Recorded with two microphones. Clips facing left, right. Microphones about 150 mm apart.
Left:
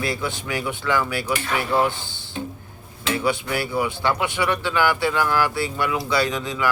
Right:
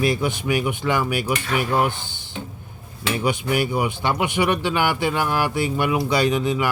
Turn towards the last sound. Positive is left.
turn(degrees=-20)  # may be behind; listen again after turning